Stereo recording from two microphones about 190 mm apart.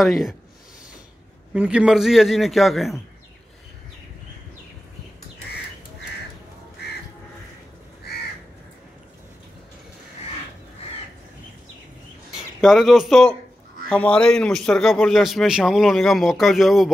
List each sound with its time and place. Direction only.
0.0 s speech: centre (ahead or behind)
1.5 s speech: 5° right (ahead or behind)
8.1 s crow: 55° left (ahead or behind)
12.6 s speech: centre (ahead or behind)